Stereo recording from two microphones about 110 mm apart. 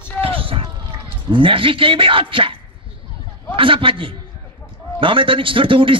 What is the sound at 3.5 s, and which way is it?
A man's voice, 55° right (ahead or behind).